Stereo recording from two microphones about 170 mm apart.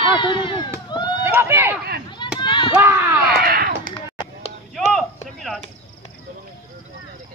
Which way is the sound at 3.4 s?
60° right (ahead or behind).